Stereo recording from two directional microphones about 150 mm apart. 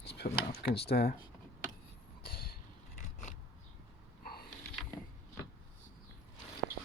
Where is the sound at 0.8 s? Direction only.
90° left.